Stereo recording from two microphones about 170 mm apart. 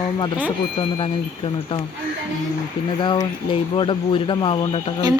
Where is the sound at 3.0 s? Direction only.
30° left (ahead or behind).